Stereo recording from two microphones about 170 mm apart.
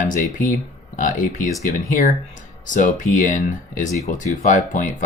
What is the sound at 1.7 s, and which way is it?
Speech, 50° left (ahead or behind).